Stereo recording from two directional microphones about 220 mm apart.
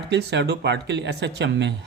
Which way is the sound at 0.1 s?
50° right (ahead or behind).